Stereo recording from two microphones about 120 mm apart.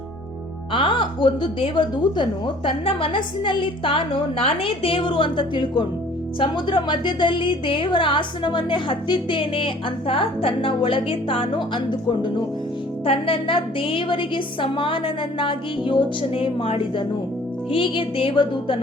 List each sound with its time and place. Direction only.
0.7 s speech: 45° left (ahead or behind)